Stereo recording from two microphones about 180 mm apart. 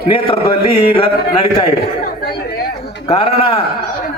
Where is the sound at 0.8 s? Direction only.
30° left (ahead or behind).